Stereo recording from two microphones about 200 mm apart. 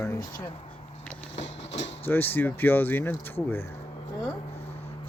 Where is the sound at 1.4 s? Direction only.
60° left (ahead or behind).